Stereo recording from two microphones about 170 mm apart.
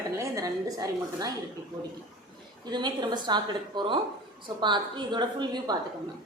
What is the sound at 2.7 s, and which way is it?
A woman's voice, 25° right (ahead or behind).